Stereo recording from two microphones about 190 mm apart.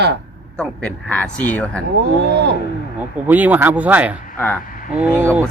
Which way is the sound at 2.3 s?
65° right (ahead or behind).